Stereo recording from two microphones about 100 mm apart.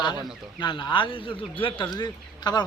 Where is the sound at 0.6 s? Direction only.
50° left (ahead or behind).